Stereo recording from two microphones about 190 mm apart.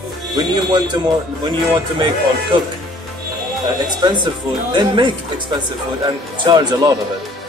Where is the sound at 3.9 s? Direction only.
25° right (ahead or behind).